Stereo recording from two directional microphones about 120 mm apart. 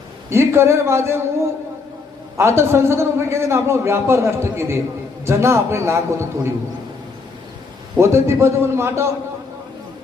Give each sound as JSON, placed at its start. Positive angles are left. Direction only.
{"t": 0.3, "sound": "a man's voice", "side_deg": -20}
{"t": 7.9, "sound": "a man's voice", "side_deg": -25}